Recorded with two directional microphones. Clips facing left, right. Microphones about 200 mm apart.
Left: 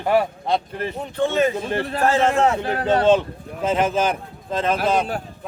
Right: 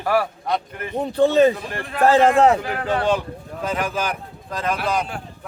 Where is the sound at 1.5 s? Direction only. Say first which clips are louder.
Left 6 dB; 25° left (ahead or behind).